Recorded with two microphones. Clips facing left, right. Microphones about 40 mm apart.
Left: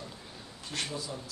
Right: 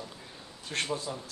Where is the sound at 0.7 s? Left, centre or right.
Right.